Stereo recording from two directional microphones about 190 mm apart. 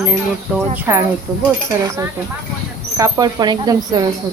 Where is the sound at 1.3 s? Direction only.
Centre (ahead or behind).